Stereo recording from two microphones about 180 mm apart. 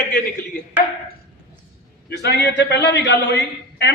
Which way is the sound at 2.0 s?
70° left (ahead or behind).